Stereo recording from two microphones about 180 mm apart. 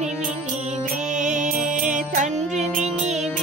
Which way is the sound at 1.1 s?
45° right (ahead or behind).